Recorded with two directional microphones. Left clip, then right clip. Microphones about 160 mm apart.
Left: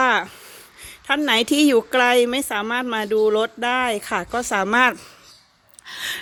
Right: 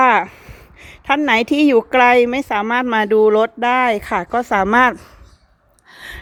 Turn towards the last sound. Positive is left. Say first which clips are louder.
# left 6 dB
turn(degrees=-5)  # may be behind; listen again after turning